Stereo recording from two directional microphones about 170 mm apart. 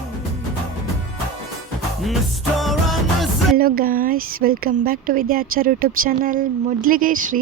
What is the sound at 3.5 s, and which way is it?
A woman's voice, 60° right (ahead or behind).